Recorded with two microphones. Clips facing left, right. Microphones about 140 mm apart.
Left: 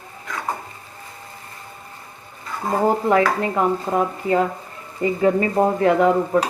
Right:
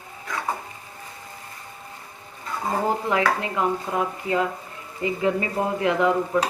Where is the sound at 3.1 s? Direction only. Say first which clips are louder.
Left 5 dB; 40° left (ahead or behind).